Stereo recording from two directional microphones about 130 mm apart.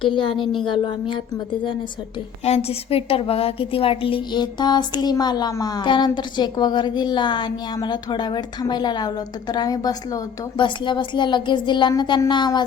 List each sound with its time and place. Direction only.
0.0 s a woman's voice: 40° left (ahead or behind)
2.4 s a woman's voice: 50° left (ahead or behind); by 12.6 s 35° left (ahead or behind)